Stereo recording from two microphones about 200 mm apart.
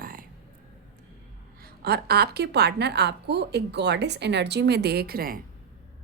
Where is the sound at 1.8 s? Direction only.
50° right (ahead or behind).